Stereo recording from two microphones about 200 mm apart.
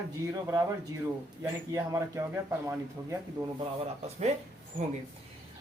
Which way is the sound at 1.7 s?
15° right (ahead or behind).